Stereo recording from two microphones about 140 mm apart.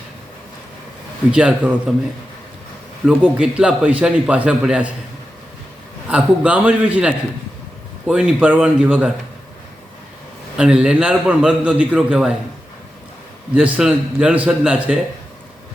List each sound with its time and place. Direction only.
1.3 s a man's voice: 5° right (ahead or behind)
3.1 s a man's voice: 5° right (ahead or behind)
6.1 s a man's voice: 10° right (ahead or behind)
10.6 s a man's voice: 5° right (ahead or behind)
13.5 s a man's voice: 10° right (ahead or behind)